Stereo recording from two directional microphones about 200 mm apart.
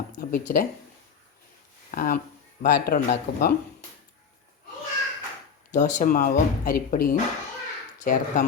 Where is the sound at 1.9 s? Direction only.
45° left (ahead or behind).